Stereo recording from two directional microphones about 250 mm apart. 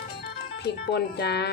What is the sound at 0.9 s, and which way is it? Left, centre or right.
Speech, left.